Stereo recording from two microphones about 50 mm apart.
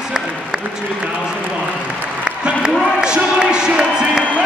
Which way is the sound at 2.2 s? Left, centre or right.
Centre.